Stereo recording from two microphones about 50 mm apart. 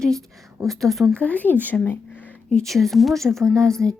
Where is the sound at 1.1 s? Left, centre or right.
Left.